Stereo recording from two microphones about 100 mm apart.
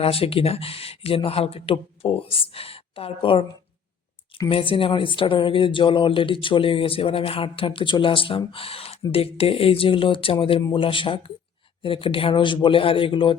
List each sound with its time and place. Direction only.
0.0 s speech: 70° left (ahead or behind)
4.4 s speech: 60° left (ahead or behind)